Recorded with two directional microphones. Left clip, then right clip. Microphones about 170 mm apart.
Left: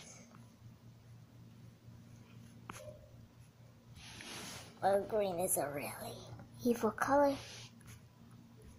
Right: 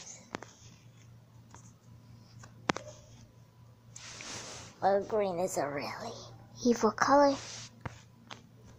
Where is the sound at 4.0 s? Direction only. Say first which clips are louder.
Right 5 dB; 60° right (ahead or behind).